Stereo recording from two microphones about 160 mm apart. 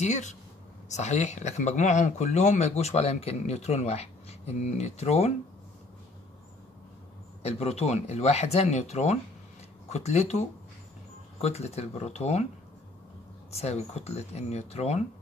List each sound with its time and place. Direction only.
0.0 s speech: 45° left (ahead or behind)
7.4 s speech: 40° left (ahead or behind)
11.4 s speech: 40° left (ahead or behind)
13.5 s speech: 40° left (ahead or behind)